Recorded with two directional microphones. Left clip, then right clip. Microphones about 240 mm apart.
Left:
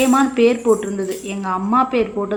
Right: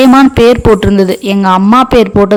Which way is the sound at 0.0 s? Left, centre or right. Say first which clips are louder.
Right 10 dB; right.